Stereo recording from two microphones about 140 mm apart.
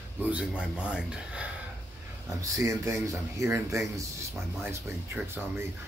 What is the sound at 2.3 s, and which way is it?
Speech, 25° right (ahead or behind).